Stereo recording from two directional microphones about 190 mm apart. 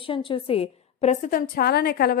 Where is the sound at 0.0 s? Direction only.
30° left (ahead or behind).